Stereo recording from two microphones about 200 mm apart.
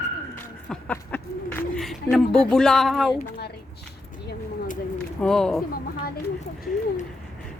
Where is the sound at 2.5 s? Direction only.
Centre (ahead or behind).